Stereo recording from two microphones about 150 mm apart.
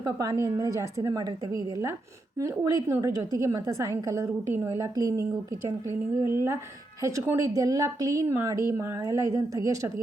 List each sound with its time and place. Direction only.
0.0 s speech: 20° right (ahead or behind)